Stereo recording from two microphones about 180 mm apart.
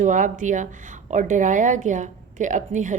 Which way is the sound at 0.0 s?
45° right (ahead or behind).